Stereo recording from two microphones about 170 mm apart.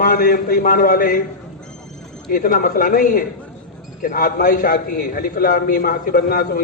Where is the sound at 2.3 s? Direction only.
55° left (ahead or behind).